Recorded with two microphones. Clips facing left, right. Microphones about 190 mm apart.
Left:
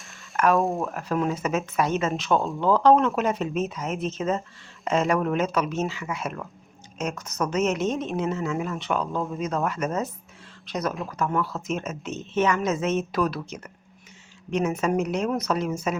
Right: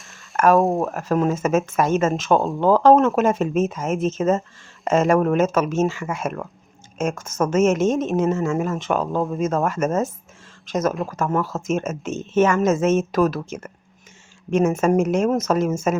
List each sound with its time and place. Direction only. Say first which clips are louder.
0.3 s speech: right 5 dB; 45° right (ahead or behind)